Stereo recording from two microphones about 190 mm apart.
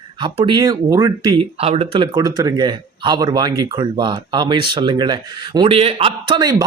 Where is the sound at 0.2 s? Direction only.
25° right (ahead or behind).